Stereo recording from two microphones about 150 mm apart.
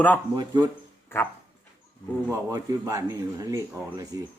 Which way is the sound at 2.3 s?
20° right (ahead or behind).